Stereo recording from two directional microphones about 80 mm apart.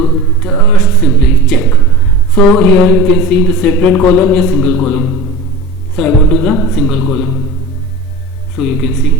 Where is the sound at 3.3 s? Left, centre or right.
Centre.